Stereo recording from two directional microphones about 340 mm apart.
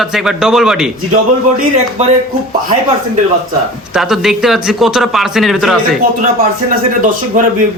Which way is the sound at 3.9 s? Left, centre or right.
Centre.